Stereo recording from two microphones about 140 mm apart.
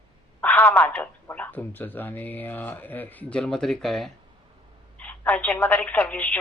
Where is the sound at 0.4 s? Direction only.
10° left (ahead or behind).